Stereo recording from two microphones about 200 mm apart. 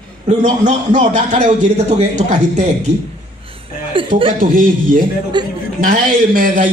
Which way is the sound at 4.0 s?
25° right (ahead or behind).